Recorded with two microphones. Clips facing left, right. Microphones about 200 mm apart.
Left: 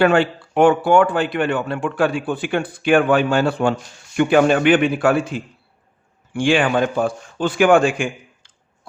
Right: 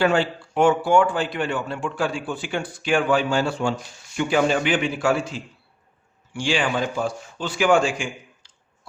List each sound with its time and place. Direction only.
0.0 s a man's voice: 60° left (ahead or behind)